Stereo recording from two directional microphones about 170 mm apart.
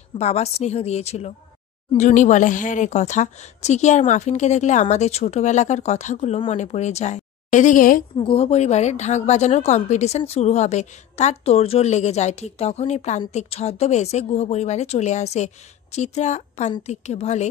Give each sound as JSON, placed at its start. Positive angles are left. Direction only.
{"t": 0.2, "sound": "speech", "side_deg": 40}
{"t": 8.2, "sound": "speech", "side_deg": 35}